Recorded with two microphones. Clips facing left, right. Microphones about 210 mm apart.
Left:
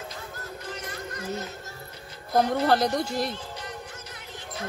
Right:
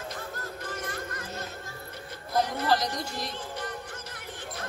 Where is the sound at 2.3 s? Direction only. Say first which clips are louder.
Left 4 dB; 60° left (ahead or behind).